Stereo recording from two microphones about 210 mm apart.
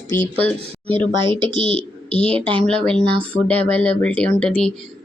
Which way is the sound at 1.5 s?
30° left (ahead or behind).